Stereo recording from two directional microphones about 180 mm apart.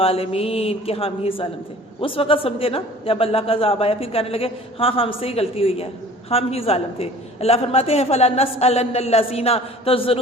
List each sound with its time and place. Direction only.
0.0 s a man's voice: 35° left (ahead or behind)